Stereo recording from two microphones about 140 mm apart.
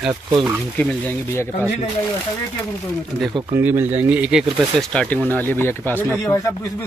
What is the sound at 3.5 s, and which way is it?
Speech, 15° right (ahead or behind).